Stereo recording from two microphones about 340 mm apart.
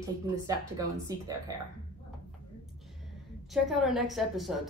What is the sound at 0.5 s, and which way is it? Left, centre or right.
Speech, centre.